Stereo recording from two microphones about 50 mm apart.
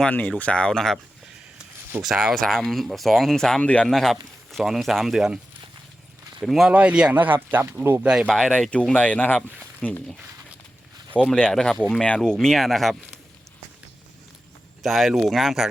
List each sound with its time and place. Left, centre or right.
0.1 s speech: left; by 0.9 s centre
1.9 s speech: right
2.3 s speech: centre
3.6 s speech: left
3.8 s speech: centre
6.4 s speech: centre
6.7 s speech: right
7.1 s speech: right
8.0 s speech: centre
8.3 s speech: centre
8.7 s speech: left
11.3 s speech: left; by 12.9 s centre
14.8 s speech: centre